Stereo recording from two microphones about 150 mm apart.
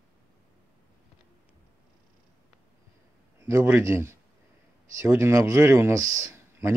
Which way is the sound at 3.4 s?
15° right (ahead or behind).